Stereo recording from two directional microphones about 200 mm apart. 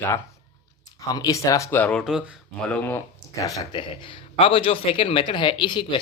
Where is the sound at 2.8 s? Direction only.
15° left (ahead or behind).